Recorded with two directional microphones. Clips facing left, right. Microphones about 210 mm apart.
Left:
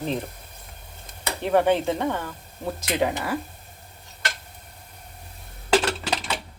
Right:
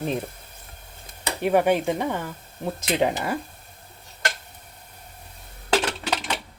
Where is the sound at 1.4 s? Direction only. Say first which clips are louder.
Even; 10° right (ahead or behind).